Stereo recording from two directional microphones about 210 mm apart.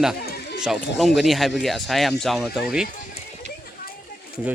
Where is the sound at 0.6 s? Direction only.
Centre (ahead or behind).